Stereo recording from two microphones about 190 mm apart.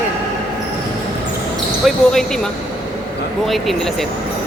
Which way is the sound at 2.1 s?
5° left (ahead or behind).